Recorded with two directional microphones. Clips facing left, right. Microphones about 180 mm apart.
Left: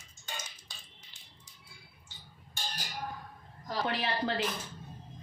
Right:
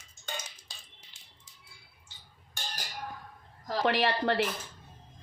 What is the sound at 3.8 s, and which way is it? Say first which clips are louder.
Speech: right 6 dB; 75° right (ahead or behind).